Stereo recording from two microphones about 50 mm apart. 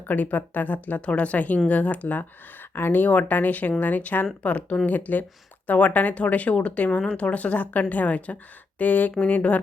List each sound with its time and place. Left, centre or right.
0.1 s speech: left
2.7 s speech: left